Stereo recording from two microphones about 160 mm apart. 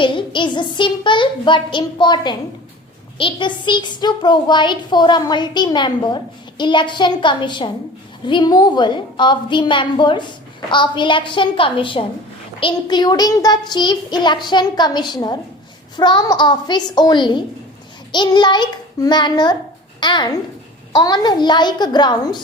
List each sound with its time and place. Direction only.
0.0 s a woman's voice: 30° left (ahead or behind)